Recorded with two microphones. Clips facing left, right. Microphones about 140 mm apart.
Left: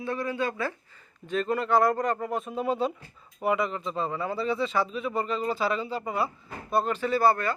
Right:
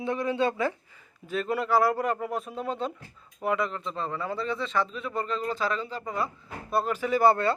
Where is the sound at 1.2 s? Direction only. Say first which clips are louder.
Left 1 dB; 5° right (ahead or behind).